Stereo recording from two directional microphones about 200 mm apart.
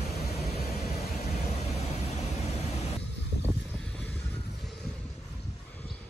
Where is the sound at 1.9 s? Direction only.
35° left (ahead or behind).